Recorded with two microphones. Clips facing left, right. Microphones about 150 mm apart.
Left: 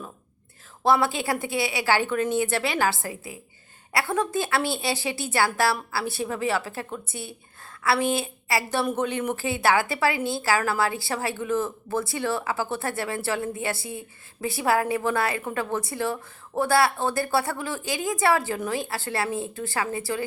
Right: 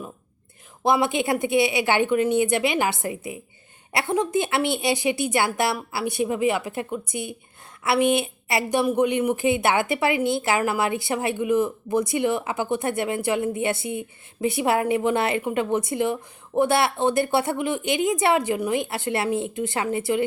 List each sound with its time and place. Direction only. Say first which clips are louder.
0.9 s a woman's voice: right 1 dB; 20° right (ahead or behind)